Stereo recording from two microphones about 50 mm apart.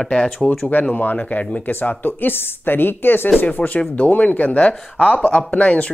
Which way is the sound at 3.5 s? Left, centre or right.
Left.